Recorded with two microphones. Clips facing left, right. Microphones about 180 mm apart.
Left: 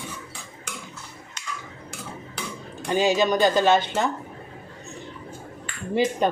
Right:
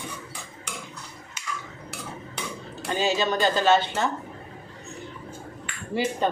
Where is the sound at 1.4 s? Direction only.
5° right (ahead or behind).